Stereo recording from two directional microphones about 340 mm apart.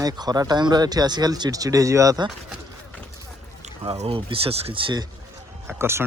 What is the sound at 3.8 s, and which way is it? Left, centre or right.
Speech, centre.